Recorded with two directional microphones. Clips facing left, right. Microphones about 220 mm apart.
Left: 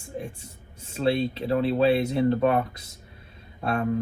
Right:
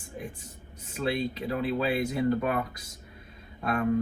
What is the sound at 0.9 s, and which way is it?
Speech, 30° left (ahead or behind).